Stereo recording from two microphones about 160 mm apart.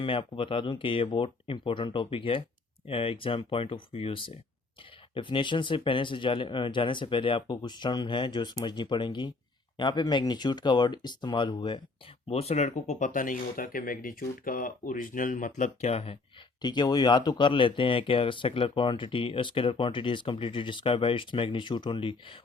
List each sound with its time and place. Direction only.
0.0 s speech: 35° left (ahead or behind)
12.3 s speech: 40° left (ahead or behind)
16.6 s speech: 25° left (ahead or behind)